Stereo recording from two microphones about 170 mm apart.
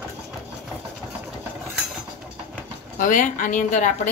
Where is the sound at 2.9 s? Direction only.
50° left (ahead or behind).